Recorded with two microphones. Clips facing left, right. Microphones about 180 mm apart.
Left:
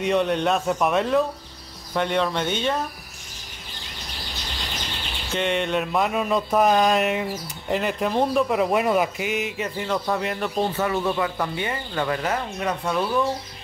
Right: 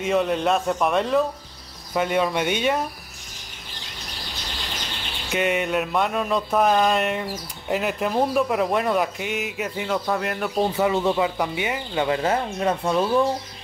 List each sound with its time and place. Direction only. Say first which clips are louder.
0.0 s speech: even; centre (ahead or behind)
5.3 s speech: right 1 dB; 5° right (ahead or behind)
10.8 s speech: right 5 dB; 20° right (ahead or behind)
12.2 s speech: right 3 dB; 25° right (ahead or behind)